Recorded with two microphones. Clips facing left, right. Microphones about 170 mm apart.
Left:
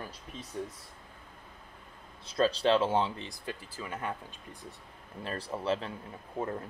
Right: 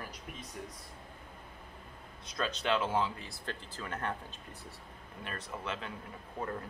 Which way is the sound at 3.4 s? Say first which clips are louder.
Even; 10° left (ahead or behind).